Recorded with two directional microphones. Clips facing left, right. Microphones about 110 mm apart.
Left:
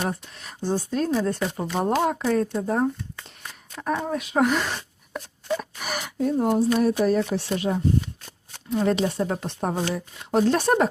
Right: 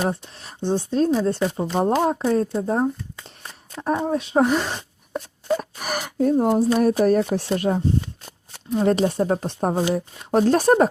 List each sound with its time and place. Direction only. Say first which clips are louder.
0.0 s speech: right 4 dB; 30° right (ahead or behind)
5.5 s a woman's voice: right 4 dB; 45° right (ahead or behind)